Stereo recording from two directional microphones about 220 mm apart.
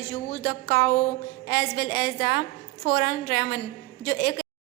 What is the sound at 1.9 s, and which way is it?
Speech, 45° left (ahead or behind).